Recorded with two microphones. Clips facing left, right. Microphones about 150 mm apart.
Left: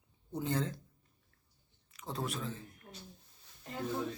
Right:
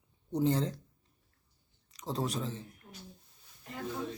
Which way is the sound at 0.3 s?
35° right (ahead or behind).